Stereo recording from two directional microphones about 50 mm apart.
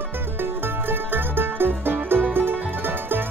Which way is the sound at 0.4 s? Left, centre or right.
Right.